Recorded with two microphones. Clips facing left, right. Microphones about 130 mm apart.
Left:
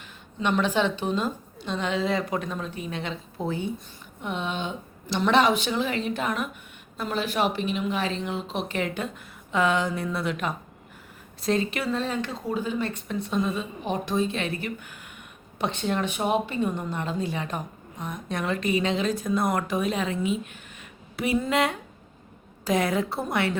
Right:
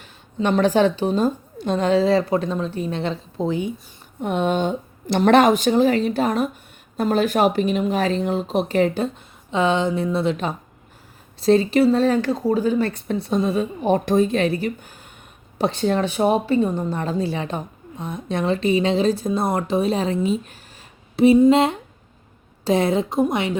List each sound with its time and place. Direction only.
0.0 s speech: 35° right (ahead or behind)
3.4 s speech: 15° right (ahead or behind)
4.2 s a woman's voice: 50° right (ahead or behind)
13.8 s speech: 50° right (ahead or behind)
21.2 s speech: 25° right (ahead or behind)